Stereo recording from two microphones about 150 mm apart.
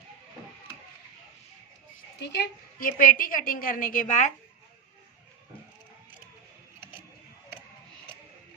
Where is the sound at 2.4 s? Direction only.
70° left (ahead or behind); by 4.3 s 55° left (ahead or behind).